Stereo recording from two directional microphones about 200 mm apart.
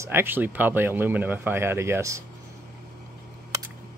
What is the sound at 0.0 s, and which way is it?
Speech, 10° right (ahead or behind).